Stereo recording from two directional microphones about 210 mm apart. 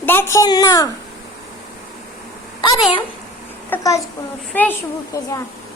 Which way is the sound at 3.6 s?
10° left (ahead or behind).